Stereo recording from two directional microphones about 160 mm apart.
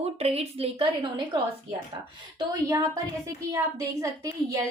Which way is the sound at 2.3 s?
20° right (ahead or behind).